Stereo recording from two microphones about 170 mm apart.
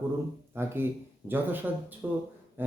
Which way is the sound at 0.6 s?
15° right (ahead or behind).